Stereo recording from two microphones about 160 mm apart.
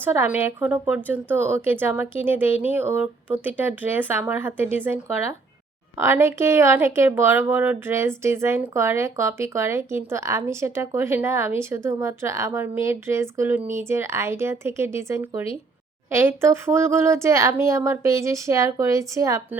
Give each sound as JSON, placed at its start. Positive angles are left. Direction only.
{"t": 0.0, "sound": "speech", "side_deg": -15}
{"t": 6.0, "sound": "speech", "side_deg": -15}